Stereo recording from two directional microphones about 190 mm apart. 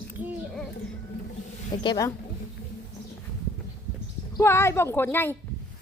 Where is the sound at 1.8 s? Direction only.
20° left (ahead or behind).